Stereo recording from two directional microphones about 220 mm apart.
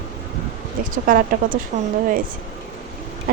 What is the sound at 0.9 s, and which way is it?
Speech, 40° right (ahead or behind).